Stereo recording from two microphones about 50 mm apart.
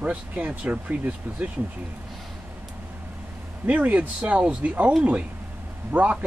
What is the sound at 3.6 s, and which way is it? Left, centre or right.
Speech, right.